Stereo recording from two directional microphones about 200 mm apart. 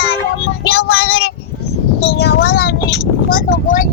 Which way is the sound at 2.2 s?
50° left (ahead or behind).